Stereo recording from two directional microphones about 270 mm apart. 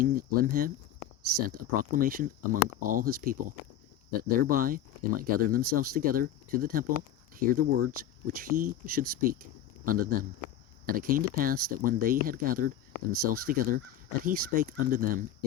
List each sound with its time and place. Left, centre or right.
0.0 s speech: right